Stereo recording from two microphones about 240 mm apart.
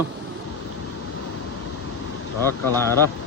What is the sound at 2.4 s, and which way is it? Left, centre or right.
Speech, centre.